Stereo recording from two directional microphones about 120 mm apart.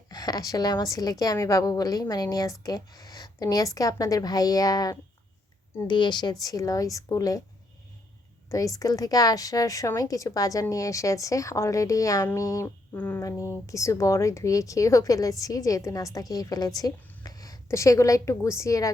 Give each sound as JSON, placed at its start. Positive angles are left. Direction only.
{"t": 0.1, "sound": "a woman's voice", "side_deg": 35}
{"t": 8.4, "sound": "a woman's voice", "side_deg": 30}
{"t": 13.2, "sound": "a woman's voice", "side_deg": 25}